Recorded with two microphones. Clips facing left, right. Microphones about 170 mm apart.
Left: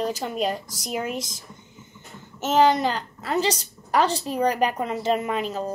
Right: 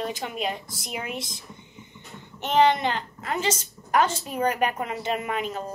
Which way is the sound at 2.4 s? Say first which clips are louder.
Left 2 dB; 40° left (ahead or behind).